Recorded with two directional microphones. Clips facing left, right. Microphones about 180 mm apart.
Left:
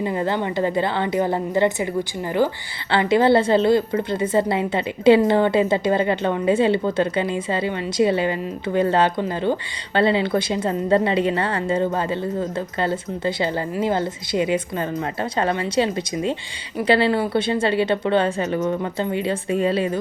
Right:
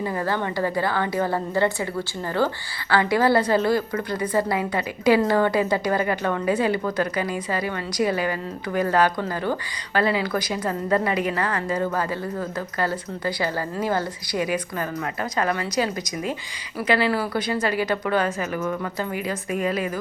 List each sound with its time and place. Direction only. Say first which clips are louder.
0.0 s a woman's voice: left 3 dB; 20° left (ahead or behind)